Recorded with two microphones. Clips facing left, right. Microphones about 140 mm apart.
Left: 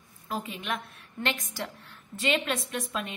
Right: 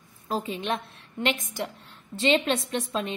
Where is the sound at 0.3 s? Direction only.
30° right (ahead or behind).